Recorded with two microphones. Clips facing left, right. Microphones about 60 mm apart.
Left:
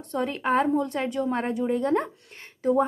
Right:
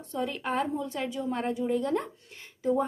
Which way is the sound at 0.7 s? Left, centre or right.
Left.